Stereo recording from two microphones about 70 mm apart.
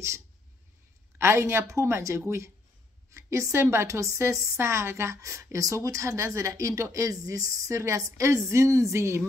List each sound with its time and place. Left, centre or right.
1.1 s a woman's voice: right
3.8 s speech: right